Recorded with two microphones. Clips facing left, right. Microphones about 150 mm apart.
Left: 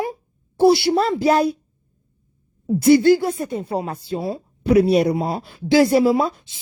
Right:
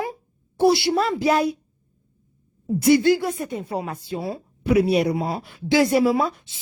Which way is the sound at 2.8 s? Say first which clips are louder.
Left 4 dB; 35° left (ahead or behind).